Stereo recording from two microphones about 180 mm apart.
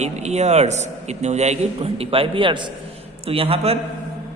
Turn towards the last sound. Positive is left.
turn(degrees=-30)  # may be behind; listen again after turning